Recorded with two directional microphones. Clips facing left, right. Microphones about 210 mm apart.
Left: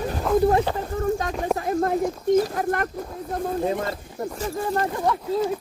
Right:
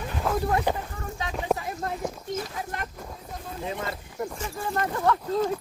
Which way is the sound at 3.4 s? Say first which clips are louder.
Left 10 dB; 45° left (ahead or behind).